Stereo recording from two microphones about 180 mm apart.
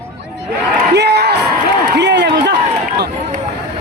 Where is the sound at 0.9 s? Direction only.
65° right (ahead or behind).